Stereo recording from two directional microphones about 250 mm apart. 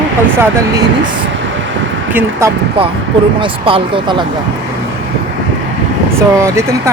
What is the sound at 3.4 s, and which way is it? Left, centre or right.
Speech, right.